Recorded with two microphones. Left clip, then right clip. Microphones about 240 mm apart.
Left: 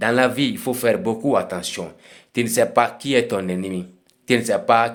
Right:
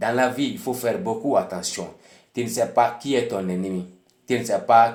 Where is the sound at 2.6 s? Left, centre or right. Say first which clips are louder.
Left 2 dB; left.